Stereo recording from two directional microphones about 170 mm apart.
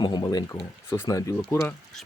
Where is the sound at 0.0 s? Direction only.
25° left (ahead or behind).